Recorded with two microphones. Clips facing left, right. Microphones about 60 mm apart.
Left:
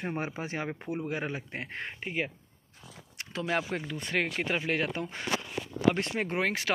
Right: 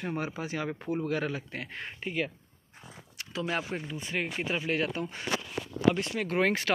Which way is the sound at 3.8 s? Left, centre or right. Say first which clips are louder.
Left 3 dB; left.